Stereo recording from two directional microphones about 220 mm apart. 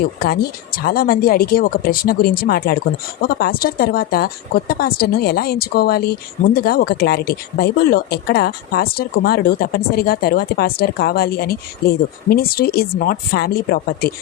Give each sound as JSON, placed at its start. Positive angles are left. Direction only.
{"t": 0.2, "sound": "speech", "side_deg": 45}